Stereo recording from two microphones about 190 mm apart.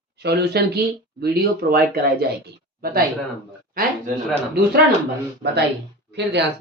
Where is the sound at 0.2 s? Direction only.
60° right (ahead or behind).